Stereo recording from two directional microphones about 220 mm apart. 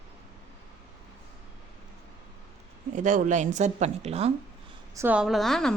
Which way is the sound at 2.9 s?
35° right (ahead or behind).